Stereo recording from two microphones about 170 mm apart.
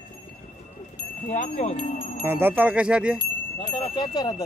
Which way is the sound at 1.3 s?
50° left (ahead or behind).